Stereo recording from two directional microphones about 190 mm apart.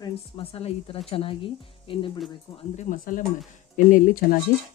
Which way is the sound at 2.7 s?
45° left (ahead or behind).